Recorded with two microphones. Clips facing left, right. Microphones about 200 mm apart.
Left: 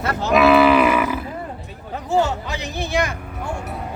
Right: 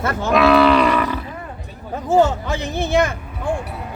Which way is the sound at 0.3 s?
5° left (ahead or behind).